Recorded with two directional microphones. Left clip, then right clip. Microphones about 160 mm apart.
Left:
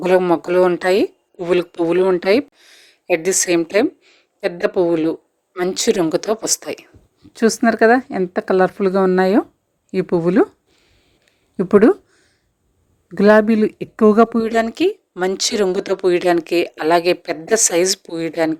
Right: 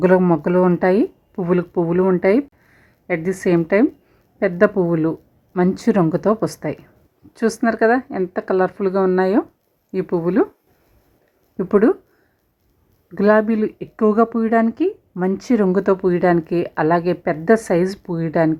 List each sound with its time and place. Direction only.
0.0 s a woman's voice: 20° left (ahead or behind)
11.5 s a woman's voice: 25° left (ahead or behind)
13.1 s a woman's voice: 25° left (ahead or behind)
13.7 s a woman's voice: 40° left (ahead or behind); by 18.5 s 20° left (ahead or behind)